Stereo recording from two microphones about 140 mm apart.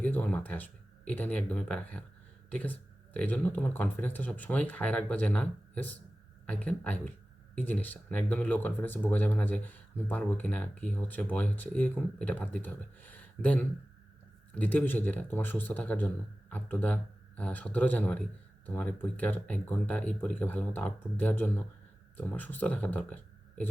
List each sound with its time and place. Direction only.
0.0 s speech: 10° left (ahead or behind)